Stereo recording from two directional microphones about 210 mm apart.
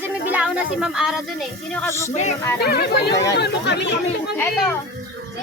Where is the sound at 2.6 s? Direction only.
50° left (ahead or behind).